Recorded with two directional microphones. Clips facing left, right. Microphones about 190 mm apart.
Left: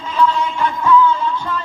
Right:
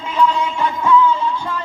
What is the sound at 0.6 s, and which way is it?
Music, 25° right (ahead or behind).